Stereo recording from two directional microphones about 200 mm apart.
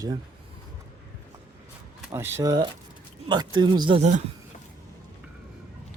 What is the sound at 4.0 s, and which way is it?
Speech, 35° right (ahead or behind).